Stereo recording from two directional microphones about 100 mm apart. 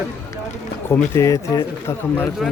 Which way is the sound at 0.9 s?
30° left (ahead or behind).